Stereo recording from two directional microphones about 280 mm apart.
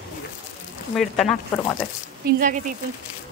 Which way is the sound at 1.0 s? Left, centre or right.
Centre.